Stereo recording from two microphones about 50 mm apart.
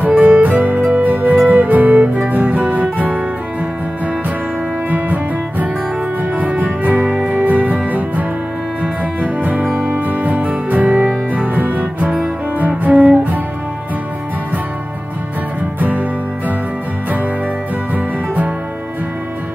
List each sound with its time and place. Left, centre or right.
0.2 s music: right
4.8 s music: right
15.8 s music: right
17.9 s music: right